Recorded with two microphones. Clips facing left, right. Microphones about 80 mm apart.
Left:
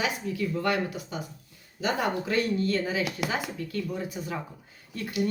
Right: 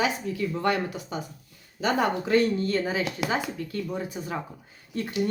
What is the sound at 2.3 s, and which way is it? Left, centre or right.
Speech, right.